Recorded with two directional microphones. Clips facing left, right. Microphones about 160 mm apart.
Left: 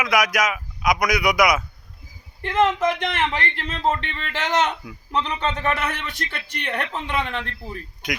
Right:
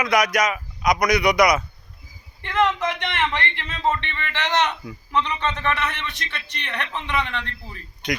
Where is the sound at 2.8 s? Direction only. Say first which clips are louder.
Left 3 dB; 45° left (ahead or behind).